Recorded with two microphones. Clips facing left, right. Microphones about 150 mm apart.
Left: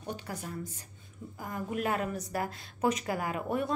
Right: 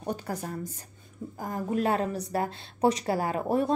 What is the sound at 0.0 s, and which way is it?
A woman's voice, 45° right (ahead or behind).